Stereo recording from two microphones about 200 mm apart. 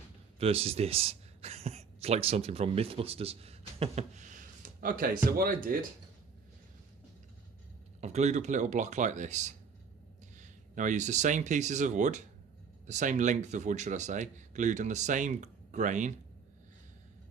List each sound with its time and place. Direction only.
0.3 s speech: 30° right (ahead or behind); by 5.7 s 45° right (ahead or behind)
8.0 s speech: 35° right (ahead or behind)